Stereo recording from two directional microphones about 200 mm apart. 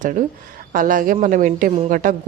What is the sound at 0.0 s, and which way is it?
A man's voice, 40° right (ahead or behind).